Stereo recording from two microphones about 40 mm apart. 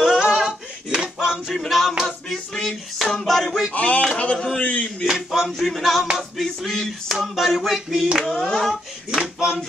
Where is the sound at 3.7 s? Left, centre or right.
Left.